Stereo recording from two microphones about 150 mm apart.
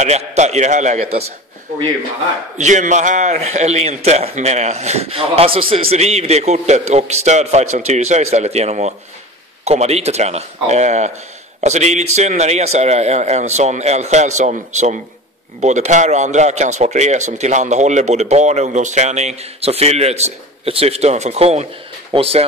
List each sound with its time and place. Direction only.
0.0 s a man's voice: 50° right (ahead or behind)
2.5 s a man's voice: 55° right (ahead or behind)